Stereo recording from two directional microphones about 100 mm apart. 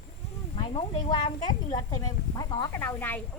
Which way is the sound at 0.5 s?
60° left (ahead or behind).